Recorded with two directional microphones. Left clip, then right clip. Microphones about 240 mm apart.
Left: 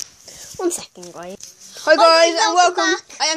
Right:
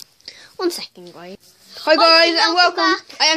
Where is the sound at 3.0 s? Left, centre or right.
Centre.